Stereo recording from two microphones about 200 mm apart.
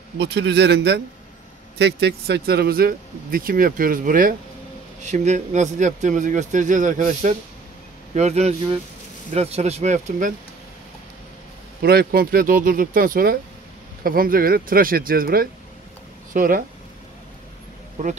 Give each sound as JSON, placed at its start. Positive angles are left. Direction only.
{"t": 0.2, "sound": "a man's voice", "side_deg": -60}
{"t": 11.8, "sound": "speech", "side_deg": -50}
{"t": 18.0, "sound": "speech", "side_deg": -40}